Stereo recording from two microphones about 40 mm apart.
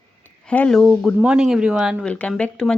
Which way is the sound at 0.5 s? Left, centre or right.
Left.